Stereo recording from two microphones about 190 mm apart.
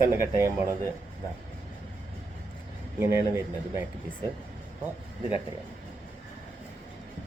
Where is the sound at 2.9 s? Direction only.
10° right (ahead or behind).